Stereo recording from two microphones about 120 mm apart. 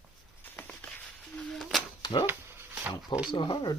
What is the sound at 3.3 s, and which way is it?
Speech, 40° left (ahead or behind).